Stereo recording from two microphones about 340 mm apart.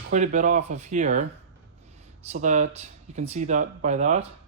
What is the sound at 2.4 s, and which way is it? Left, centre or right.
Speech, right.